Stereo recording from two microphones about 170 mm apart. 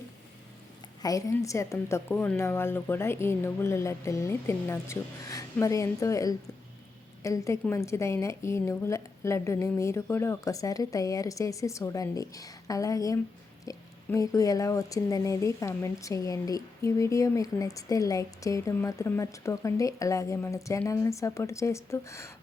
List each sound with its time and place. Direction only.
1.0 s a woman's voice: 20° left (ahead or behind)